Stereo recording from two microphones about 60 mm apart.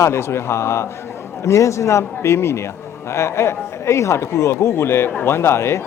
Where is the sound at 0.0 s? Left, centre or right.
Left.